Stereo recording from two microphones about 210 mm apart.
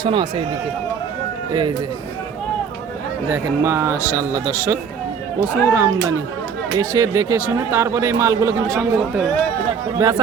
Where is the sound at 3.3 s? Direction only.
10° right (ahead or behind).